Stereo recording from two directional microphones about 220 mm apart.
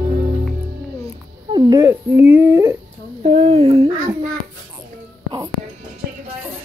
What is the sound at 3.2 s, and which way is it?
Speech, 30° right (ahead or behind).